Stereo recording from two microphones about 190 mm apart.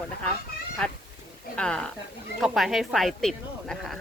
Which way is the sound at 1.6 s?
5° left (ahead or behind).